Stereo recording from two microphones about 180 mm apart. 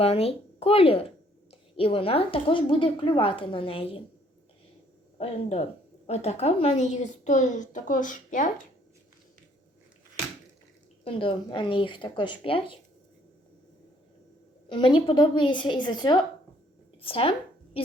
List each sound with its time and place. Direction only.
0.0 s a woman's voice: 35° left (ahead or behind)
5.1 s a woman's voice: 35° left (ahead or behind)
11.0 s a woman's voice: 30° left (ahead or behind)
14.7 s a woman's voice: 25° left (ahead or behind)